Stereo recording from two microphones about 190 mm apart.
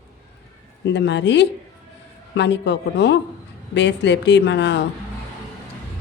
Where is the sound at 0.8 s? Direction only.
65° left (ahead or behind).